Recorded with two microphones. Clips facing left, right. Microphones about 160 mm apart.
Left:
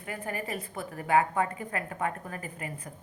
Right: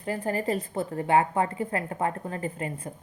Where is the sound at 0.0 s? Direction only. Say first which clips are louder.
Right 7 dB; 30° right (ahead or behind).